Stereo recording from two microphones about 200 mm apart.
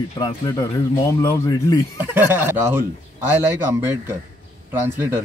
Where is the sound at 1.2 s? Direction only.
15° left (ahead or behind).